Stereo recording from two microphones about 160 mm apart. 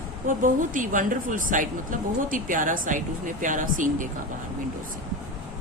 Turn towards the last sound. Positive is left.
turn(degrees=-55)  # may be behind; listen again after turning